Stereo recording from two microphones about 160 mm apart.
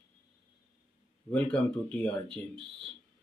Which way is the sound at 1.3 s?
10° left (ahead or behind).